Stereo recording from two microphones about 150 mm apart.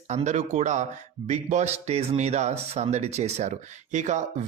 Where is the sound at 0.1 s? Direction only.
50° right (ahead or behind).